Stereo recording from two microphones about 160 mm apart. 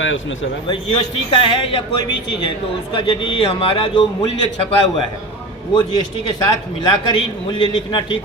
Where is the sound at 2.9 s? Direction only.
30° left (ahead or behind).